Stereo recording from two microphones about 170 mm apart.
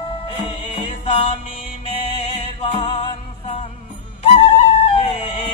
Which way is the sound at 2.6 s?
35° left (ahead or behind).